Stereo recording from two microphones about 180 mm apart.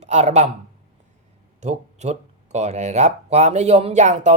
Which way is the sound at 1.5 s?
40° right (ahead or behind).